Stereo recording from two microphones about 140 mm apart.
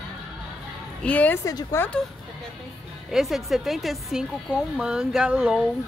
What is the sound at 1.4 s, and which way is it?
Speech, 20° left (ahead or behind).